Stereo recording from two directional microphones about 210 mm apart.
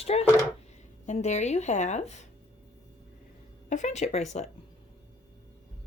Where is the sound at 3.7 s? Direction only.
35° left (ahead or behind).